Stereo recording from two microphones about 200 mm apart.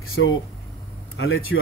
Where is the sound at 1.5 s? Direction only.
65° left (ahead or behind).